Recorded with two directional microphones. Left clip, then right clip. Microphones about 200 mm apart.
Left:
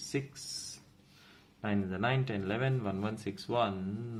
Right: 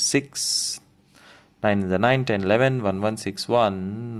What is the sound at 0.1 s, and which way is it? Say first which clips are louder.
Speech: right 9 dB; 50° right (ahead or behind).